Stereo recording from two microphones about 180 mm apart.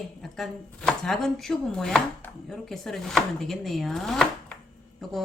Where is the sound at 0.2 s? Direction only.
Centre (ahead or behind).